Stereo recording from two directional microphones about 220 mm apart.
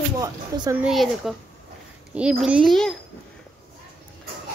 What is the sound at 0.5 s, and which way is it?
Speech, 15° right (ahead or behind).